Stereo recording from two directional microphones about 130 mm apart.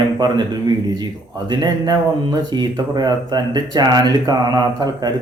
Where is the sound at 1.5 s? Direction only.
30° right (ahead or behind).